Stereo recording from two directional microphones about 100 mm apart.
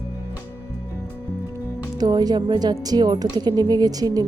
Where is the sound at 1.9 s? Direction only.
40° right (ahead or behind).